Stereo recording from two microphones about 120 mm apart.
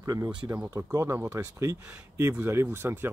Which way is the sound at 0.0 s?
25° right (ahead or behind).